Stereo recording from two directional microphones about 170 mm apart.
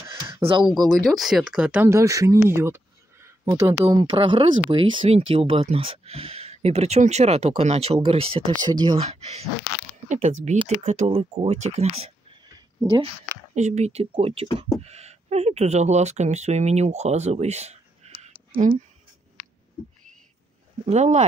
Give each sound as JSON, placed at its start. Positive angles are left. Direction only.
{"t": 0.0, "sound": "a sound", "side_deg": -15}
{"t": 0.4, "sound": "speech", "side_deg": -30}
{"t": 0.8, "sound": "speech", "side_deg": 0}
{"t": 2.4, "sound": "a sound", "side_deg": -15}
{"t": 3.6, "sound": "speech", "side_deg": -25}
{"t": 9.0, "sound": "speech", "side_deg": -40}
{"t": 13.2, "sound": "speech", "side_deg": -45}
{"t": 20.8, "sound": "speech", "side_deg": -40}